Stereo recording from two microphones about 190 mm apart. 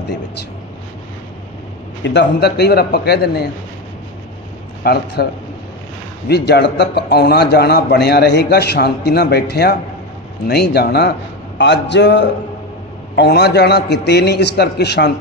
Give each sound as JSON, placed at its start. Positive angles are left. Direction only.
{"t": 2.0, "sound": "a man's voice", "side_deg": 60}
{"t": 4.8, "sound": "a man's voice", "side_deg": 55}